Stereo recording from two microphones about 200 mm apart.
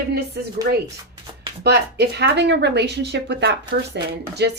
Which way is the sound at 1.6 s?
55° right (ahead or behind).